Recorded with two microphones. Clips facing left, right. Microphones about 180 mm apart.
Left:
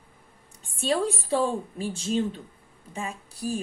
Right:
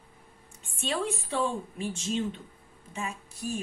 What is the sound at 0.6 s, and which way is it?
A woman's voice, 35° left (ahead or behind).